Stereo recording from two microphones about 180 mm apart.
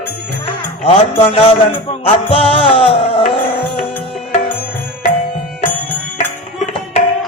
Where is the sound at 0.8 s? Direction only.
30° left (ahead or behind).